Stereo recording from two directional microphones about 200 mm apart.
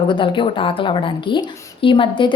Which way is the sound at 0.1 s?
25° left (ahead or behind).